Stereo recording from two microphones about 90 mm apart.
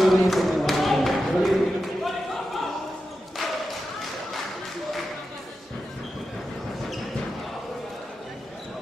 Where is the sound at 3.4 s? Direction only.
Centre (ahead or behind).